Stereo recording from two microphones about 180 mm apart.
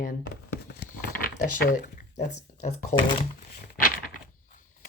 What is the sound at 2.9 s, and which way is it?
Speech, 30° left (ahead or behind).